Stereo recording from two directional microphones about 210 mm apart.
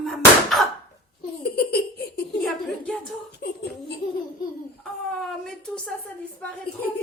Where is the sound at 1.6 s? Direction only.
50° left (ahead or behind).